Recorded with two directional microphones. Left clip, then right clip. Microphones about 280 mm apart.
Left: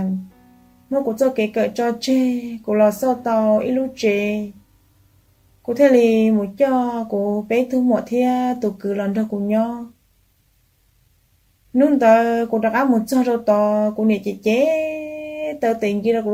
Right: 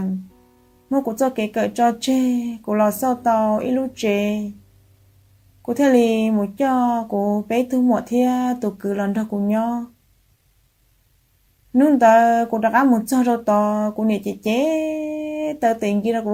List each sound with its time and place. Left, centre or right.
0.9 s speech: right
5.6 s speech: right
11.7 s speech: right
14.8 s a sound: right
16.0 s speech: right